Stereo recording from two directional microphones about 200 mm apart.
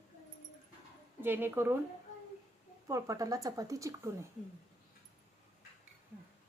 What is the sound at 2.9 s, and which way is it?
Speech, 15° right (ahead or behind).